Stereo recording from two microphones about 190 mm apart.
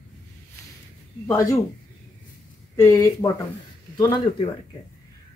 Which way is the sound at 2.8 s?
15° left (ahead or behind).